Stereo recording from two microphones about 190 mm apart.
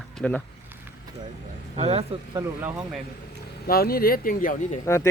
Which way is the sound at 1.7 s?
30° right (ahead or behind).